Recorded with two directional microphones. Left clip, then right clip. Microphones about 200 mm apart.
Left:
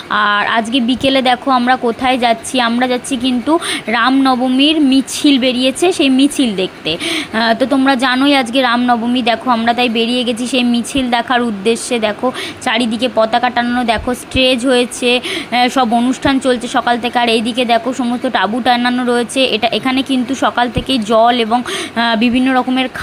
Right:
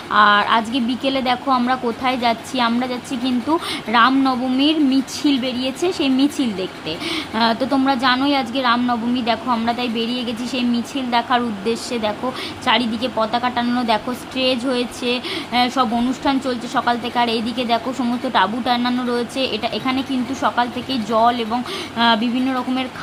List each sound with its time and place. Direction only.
0.1 s a woman's voice: 20° left (ahead or behind)